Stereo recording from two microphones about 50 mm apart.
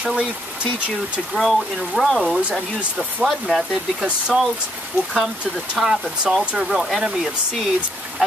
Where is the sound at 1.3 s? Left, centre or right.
Centre.